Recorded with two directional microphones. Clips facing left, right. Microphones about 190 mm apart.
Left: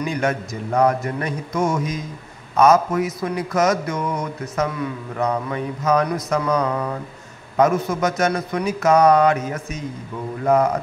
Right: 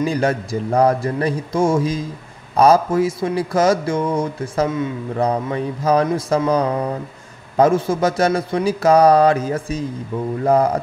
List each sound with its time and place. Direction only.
0.0 s speech: 30° right (ahead or behind)